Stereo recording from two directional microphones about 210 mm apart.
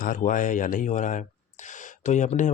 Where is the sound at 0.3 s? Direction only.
40° left (ahead or behind).